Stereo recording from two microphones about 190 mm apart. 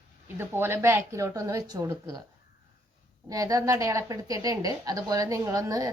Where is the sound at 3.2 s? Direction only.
20° right (ahead or behind).